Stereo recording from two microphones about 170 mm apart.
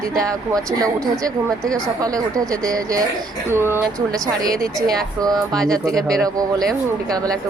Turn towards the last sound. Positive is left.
turn(degrees=5)  # may be behind; listen again after turning